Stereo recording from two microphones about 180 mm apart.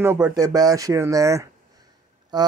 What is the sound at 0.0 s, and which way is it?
Speech, 15° right (ahead or behind).